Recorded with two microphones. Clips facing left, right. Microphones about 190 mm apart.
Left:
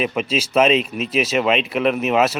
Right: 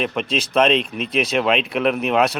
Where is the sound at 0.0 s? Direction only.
5° left (ahead or behind).